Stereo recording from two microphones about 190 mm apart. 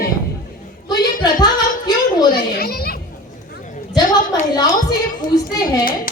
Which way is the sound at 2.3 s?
55° left (ahead or behind).